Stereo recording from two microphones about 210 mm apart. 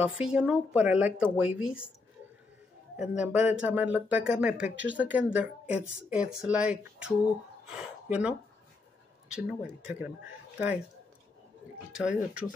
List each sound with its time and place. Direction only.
0.2 s speech: 5° right (ahead or behind)
3.0 s speech: 5° right (ahead or behind)
11.9 s speech: 5° right (ahead or behind)